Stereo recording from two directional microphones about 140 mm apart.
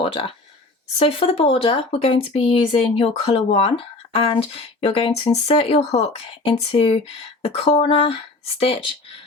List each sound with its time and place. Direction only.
0.0 s speech: 40° left (ahead or behind)